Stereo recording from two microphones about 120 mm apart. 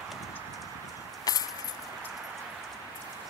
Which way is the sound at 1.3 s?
30° left (ahead or behind).